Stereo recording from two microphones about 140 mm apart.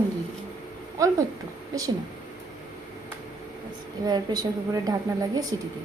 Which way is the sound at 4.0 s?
30° right (ahead or behind).